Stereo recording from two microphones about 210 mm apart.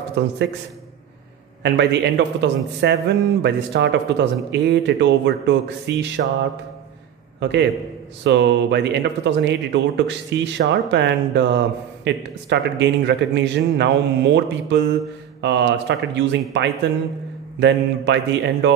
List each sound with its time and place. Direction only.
0.2 s speech: 55° right (ahead or behind)
1.6 s speech: 55° right (ahead or behind)
7.3 s a man's voice: 55° right (ahead or behind)